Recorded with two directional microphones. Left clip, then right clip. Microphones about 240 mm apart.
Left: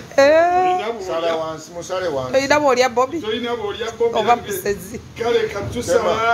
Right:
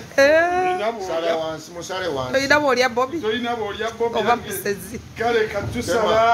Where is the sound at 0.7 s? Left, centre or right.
Centre.